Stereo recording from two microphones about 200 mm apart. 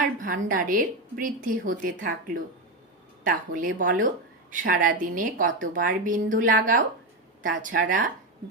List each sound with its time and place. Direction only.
0.0 s a woman's voice: 40° right (ahead or behind)